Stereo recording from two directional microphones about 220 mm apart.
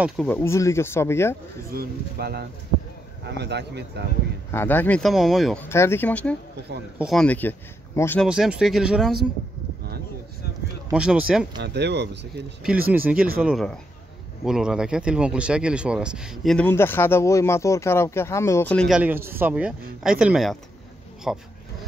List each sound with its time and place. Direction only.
0.0 s speech: 5° left (ahead or behind)
1.7 s speech: 45° right (ahead or behind)
4.5 s speech: 10° left (ahead or behind)
8.3 s speech: 5° right (ahead or behind)
10.9 s speech: 5° right (ahead or behind)
11.5 s speech: 50° right (ahead or behind)
12.9 s speech: 5° right (ahead or behind)